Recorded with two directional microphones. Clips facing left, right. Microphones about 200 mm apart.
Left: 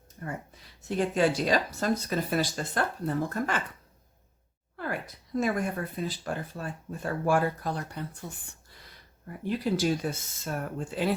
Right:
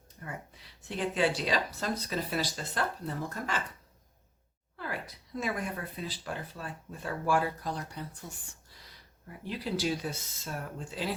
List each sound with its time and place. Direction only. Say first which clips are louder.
0.2 s speech: left 5 dB; 45° left (ahead or behind)
4.8 s speech: left 4 dB; 50° left (ahead or behind)
9.4 s speech: left 5 dB; 50° left (ahead or behind)